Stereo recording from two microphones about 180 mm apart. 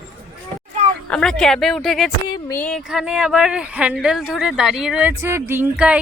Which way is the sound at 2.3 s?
15° left (ahead or behind).